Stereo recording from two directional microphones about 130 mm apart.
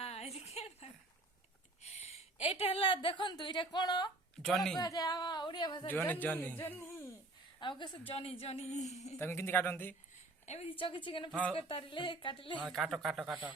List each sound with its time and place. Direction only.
0.0 s a sound: 55° left (ahead or behind)
1.8 s a woman's voice: 55° left (ahead or behind); by 4.1 s 35° left (ahead or behind)
4.4 s speech: 5° left (ahead or behind)
4.8 s speech: 30° left (ahead or behind)
5.8 s speech: 15° left (ahead or behind)
7.6 s a woman's voice: 35° left (ahead or behind); by 9.1 s 60° left (ahead or behind)
9.1 s speech: 20° left (ahead or behind)
10.4 s a woman's voice: 55° left (ahead or behind)
11.3 s speech: 10° left (ahead or behind)
11.5 s speech: 45° left (ahead or behind)
12.6 s speech: centre (ahead or behind)